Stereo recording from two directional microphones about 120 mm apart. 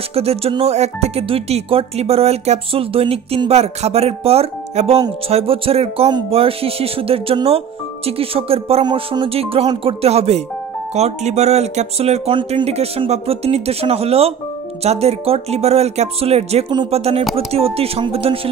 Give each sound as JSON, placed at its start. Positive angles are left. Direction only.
{"t": 0.1, "sound": "speech", "side_deg": -55}
{"t": 6.3, "sound": "music", "side_deg": -55}
{"t": 7.4, "sound": "speech", "side_deg": -55}
{"t": 8.8, "sound": "music", "side_deg": -40}
{"t": 10.0, "sound": "speech", "side_deg": -60}
{"t": 17.2, "sound": "speech", "side_deg": 0}
{"t": 17.5, "sound": "speech", "side_deg": -55}